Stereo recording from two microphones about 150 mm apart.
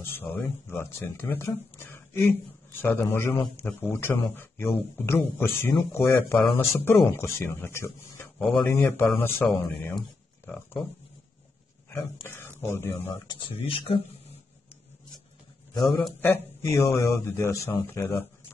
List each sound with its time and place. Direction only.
0.0 s speech: 15° left (ahead or behind)
11.9 s speech: 15° left (ahead or behind)
13.1 s speech: 30° left (ahead or behind)
16.2 s speech: 15° left (ahead or behind)